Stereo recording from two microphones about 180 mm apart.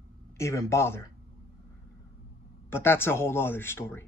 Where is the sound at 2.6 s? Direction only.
15° left (ahead or behind).